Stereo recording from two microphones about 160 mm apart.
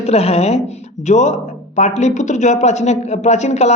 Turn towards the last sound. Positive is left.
turn(degrees=45)  # may be behind; listen again after turning